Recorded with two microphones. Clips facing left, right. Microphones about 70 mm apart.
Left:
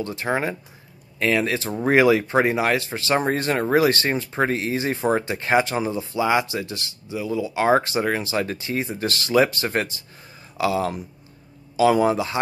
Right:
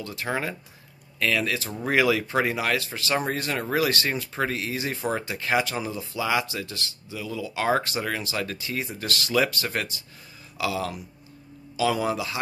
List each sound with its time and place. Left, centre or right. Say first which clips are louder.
0.0 s speech: left 5 dB; left